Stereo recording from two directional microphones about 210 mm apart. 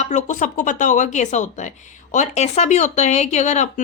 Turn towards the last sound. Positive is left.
turn(degrees=35)  # may be behind; listen again after turning